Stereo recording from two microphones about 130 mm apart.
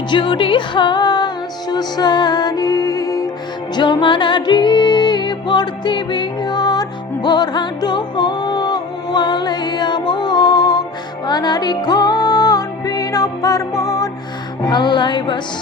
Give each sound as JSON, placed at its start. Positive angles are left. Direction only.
{"t": 0.1, "sound": "music", "side_deg": 40}